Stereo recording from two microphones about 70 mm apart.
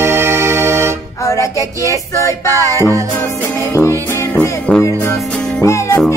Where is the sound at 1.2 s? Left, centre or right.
Left.